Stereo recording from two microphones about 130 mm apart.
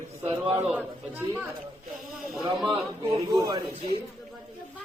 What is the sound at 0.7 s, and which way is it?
Speech, 15° right (ahead or behind).